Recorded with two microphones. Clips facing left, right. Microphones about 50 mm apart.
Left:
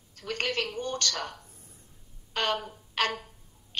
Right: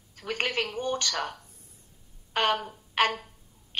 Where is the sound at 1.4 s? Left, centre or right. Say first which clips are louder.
Left 2 dB; left.